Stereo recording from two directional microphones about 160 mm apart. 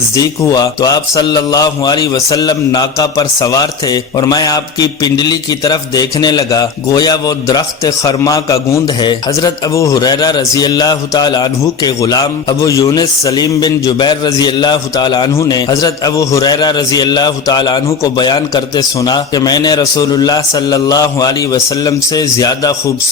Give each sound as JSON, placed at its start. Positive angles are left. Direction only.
{"t": 0.1, "sound": "speech", "side_deg": 25}